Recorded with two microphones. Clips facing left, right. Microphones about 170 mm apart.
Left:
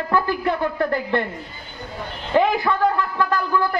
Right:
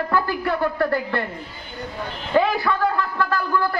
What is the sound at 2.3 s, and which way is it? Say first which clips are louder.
A man's voice: left 1 dB; 20° left (ahead or behind).